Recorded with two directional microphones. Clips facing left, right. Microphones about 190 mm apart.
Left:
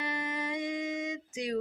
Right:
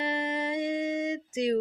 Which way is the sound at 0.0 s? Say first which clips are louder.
Right 5 dB; 30° right (ahead or behind).